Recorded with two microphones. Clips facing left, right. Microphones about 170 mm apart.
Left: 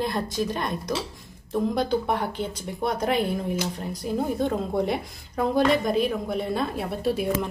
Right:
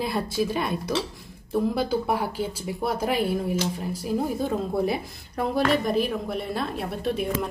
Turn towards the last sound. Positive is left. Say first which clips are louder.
# left 2 dB
turn(degrees=0)  # may be behind; listen again after turning